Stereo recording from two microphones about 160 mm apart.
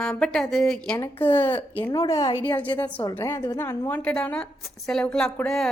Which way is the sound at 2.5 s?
10° left (ahead or behind).